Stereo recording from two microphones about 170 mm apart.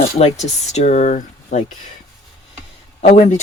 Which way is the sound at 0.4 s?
40° left (ahead or behind).